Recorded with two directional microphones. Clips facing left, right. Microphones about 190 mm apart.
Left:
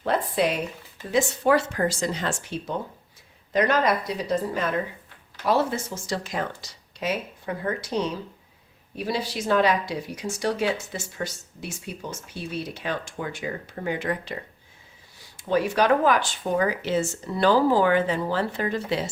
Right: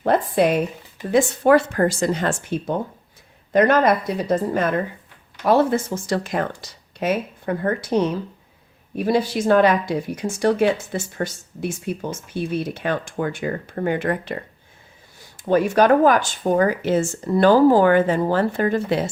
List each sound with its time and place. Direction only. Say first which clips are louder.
0.0 s a sound: right 6 dB; 50° right (ahead or behind)
1.1 s speech: right 6 dB; 55° right (ahead or behind)
15.4 s speech: right 5 dB; 50° right (ahead or behind)